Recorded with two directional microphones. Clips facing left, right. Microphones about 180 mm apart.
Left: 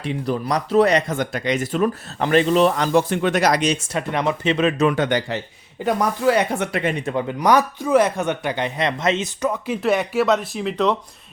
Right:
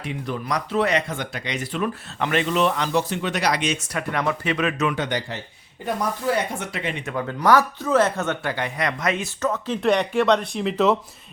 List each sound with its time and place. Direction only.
0.0 s speech: 35° left (ahead or behind)
4.9 s a man's voice: 55° left (ahead or behind)
5.8 s speech: 90° left; by 6.9 s 60° left (ahead or behind)
7.1 s speech: 20° left (ahead or behind); by 10.9 s centre (ahead or behind)